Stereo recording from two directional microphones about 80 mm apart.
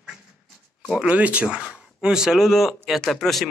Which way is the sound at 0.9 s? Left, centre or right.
Centre.